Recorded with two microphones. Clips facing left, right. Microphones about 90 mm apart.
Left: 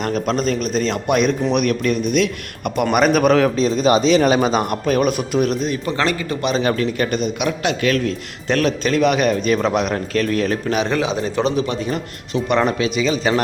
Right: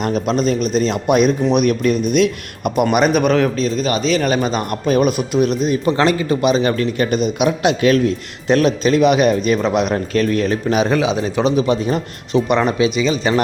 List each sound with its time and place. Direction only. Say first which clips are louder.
0.0 s a man's voice: right 2 dB; 5° right (ahead or behind)
3.6 s a man's voice: left 3 dB; 20° left (ahead or behind)
4.9 s speech: right 4 dB; 5° right (ahead or behind)
5.6 s a man's voice: right 5 dB; 20° right (ahead or behind)
6.5 s speech: right 2 dB; centre (ahead or behind)
7.1 s a man's voice: right 4 dB; 15° right (ahead or behind)
10.7 s a man's voice: right 3 dB; 10° right (ahead or behind)